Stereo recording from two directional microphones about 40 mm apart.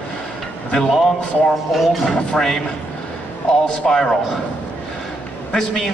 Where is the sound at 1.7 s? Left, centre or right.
Centre.